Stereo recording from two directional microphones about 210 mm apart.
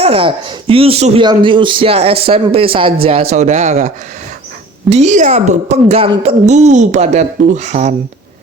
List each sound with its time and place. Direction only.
0.0 s a child's voice: 25° right (ahead or behind)